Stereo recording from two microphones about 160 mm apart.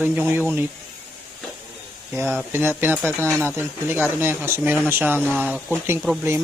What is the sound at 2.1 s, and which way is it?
Speech, 10° right (ahead or behind).